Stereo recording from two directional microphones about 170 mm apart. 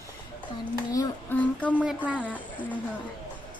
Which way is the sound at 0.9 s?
20° left (ahead or behind).